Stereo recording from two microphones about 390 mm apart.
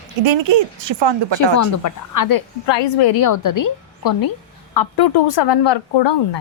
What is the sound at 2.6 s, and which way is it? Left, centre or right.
Speech, left.